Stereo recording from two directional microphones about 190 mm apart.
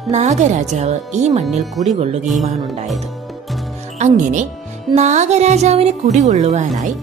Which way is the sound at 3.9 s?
40° right (ahead or behind).